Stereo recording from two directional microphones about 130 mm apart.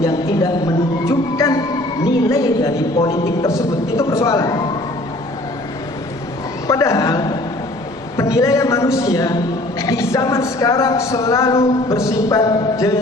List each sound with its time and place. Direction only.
0.0 s a man's voice: 25° left (ahead or behind)
1.0 s music: 25° left (ahead or behind)
2.3 s a man's voice: 25° left (ahead or behind)
6.7 s a sound: 25° left (ahead or behind)
8.1 s a man's voice: 25° left (ahead or behind)